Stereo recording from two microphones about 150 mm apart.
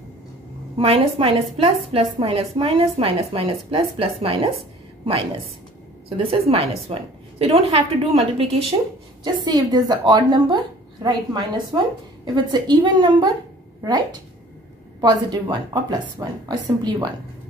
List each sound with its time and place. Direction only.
0.7 s a woman's voice: 40° right (ahead or behind)
6.0 s a woman's voice: 40° right (ahead or behind)
9.2 s a woman's voice: 25° right (ahead or behind)
15.0 s a woman's voice: 25° right (ahead or behind)